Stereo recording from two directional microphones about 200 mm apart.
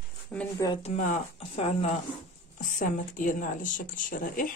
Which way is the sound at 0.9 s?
35° left (ahead or behind).